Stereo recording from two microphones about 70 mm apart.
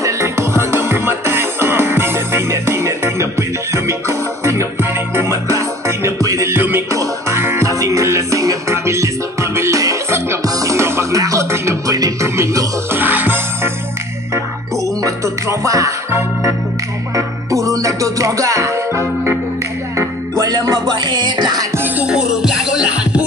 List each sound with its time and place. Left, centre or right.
0.0 s music: right
6.5 s music: right
6.9 s music: right
7.3 s music: right
7.6 s music: right
10.4 s music: right
12.9 s music: right
15.0 s music: right
16.1 s music: right
17.1 s music: right
20.0 s music: right
21.7 s music: right
22.0 s music: centre